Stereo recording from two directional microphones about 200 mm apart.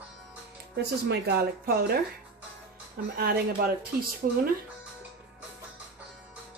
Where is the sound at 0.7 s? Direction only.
55° right (ahead or behind).